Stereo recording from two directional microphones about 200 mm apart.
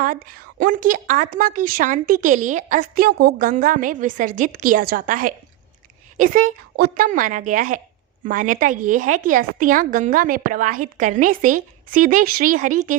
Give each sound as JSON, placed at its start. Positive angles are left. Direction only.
{"t": 0.0, "sound": "a woman's voice", "side_deg": -45}